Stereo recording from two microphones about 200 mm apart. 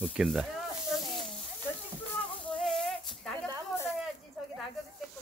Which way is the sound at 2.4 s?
Centre (ahead or behind).